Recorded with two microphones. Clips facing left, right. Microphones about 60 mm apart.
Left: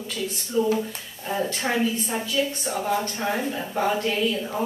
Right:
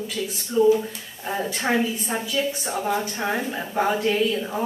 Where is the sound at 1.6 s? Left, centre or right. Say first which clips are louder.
Right 4 dB; right.